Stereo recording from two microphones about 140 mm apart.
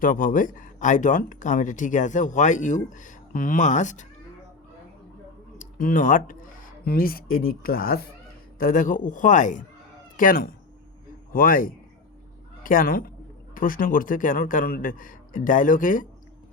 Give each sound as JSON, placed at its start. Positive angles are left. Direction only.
{"t": 0.0, "sound": "speech", "side_deg": 80}
{"t": 5.5, "sound": "speech", "side_deg": 75}
{"t": 6.8, "sound": "speech", "side_deg": 90}
{"t": 8.5, "sound": "a man's voice", "side_deg": 80}
{"t": 10.2, "sound": "a man's voice", "side_deg": 85}